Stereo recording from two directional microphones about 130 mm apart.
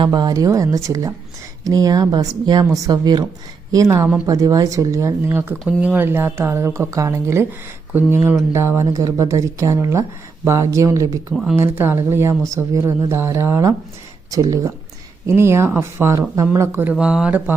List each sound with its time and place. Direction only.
0.0 s speech: 30° right (ahead or behind)
15.3 s speech: 20° right (ahead or behind)
16.9 s speech: 5° right (ahead or behind)